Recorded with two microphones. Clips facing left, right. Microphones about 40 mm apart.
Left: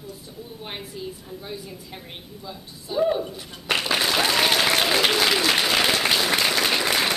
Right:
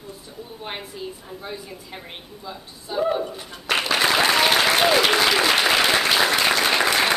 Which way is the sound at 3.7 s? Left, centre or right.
Centre.